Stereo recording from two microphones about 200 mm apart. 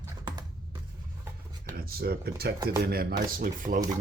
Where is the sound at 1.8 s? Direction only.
50° right (ahead or behind).